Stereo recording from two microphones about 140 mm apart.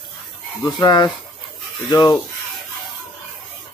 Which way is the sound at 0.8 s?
30° left (ahead or behind).